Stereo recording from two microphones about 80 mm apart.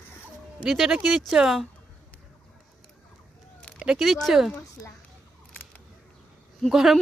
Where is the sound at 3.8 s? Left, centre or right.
Centre.